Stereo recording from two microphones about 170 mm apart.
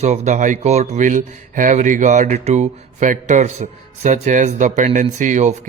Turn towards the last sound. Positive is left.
turn(degrees=-45)  # may be behind; listen again after turning